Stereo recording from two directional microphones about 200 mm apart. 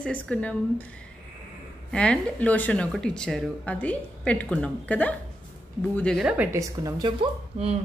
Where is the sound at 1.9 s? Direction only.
5° left (ahead or behind).